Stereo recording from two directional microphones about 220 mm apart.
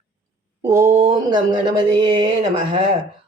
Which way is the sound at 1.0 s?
20° right (ahead or behind).